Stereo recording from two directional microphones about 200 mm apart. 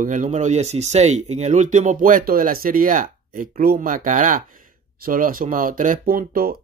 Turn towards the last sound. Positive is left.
turn(degrees=-45)  # may be behind; listen again after turning